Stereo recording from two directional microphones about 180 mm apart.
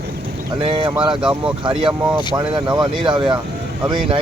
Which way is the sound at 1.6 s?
25° right (ahead or behind).